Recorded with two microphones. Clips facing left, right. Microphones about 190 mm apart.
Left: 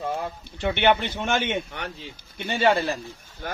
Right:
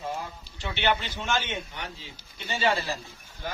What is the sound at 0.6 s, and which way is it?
Speech, 55° left (ahead or behind).